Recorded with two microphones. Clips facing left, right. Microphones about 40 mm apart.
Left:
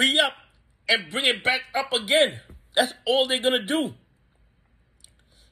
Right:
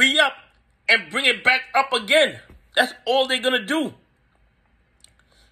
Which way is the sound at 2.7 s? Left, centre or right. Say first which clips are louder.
Right 2 dB; right.